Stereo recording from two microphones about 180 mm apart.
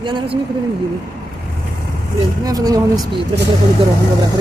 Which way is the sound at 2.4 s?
20° right (ahead or behind).